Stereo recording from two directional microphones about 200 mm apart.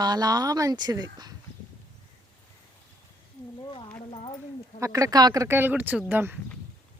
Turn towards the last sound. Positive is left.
turn(degrees=-10)  # may be behind; listen again after turning